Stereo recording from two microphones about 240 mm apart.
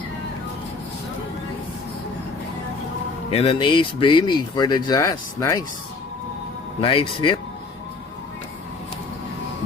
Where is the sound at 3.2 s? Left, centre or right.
Left.